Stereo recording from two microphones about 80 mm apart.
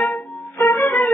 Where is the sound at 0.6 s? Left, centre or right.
Left.